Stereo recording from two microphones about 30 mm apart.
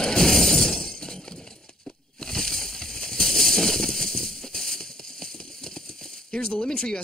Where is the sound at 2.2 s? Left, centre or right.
Centre.